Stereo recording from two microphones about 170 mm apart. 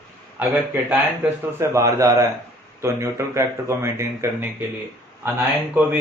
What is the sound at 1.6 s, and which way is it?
A man's voice, 20° right (ahead or behind).